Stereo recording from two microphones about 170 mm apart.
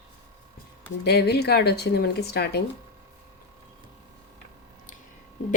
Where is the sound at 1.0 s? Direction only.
70° left (ahead or behind).